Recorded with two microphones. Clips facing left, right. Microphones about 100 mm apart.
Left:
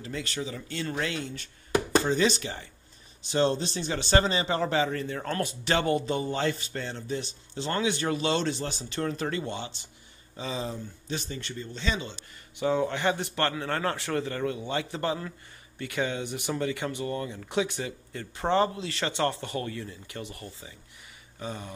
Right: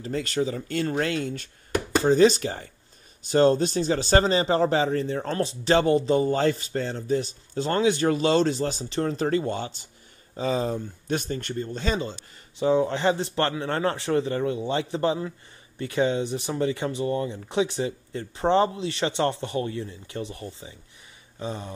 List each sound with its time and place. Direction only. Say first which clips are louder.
0.0 s a man's voice: right 8 dB; 40° right (ahead or behind)
12.6 s speech: right 4 dB; 30° right (ahead or behind)